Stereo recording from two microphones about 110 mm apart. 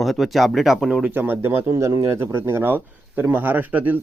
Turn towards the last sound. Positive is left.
turn(degrees=-15)  # may be behind; listen again after turning